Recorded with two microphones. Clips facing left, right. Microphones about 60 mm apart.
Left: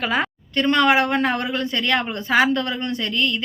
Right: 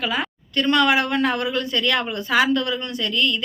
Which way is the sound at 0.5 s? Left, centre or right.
Left.